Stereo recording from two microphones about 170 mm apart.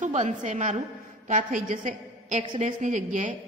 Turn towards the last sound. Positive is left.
turn(degrees=-45)  # may be behind; listen again after turning